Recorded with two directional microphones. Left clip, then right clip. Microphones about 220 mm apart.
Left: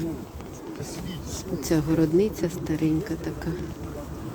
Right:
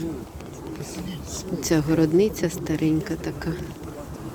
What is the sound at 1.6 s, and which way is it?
A woman's voice, centre (ahead or behind).